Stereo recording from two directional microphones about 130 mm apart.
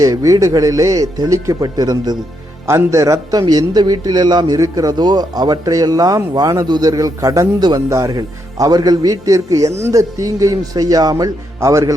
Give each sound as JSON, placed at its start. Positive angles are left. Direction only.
{"t": 0.0, "sound": "a man's voice", "side_deg": -25}